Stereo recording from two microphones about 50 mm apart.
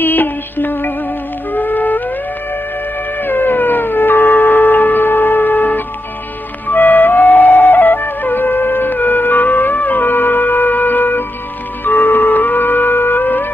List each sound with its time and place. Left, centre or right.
0.0 s music: left
3.2 s a sound: left
6.7 s music: left